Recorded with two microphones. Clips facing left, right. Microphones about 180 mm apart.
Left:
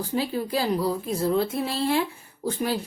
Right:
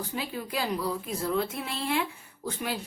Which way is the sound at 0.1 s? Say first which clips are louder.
Left 7 dB; 35° left (ahead or behind).